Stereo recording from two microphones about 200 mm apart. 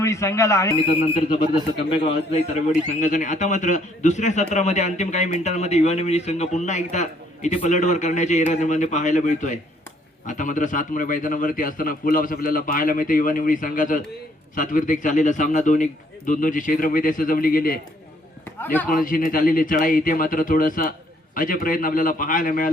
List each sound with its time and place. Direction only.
0.0 s speech: 15° left (ahead or behind)
2.0 s a man's voice: 35° left (ahead or behind)
18.6 s speech: 10° left (ahead or behind)
18.9 s a man's voice: 45° left (ahead or behind)